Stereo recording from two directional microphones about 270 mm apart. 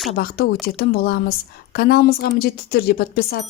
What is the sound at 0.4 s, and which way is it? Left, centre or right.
A woman's voice, left.